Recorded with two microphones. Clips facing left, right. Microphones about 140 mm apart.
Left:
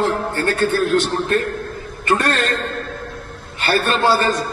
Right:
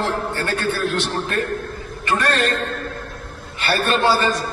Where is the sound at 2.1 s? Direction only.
45° left (ahead or behind).